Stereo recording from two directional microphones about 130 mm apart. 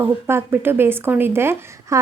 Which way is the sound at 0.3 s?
20° right (ahead or behind).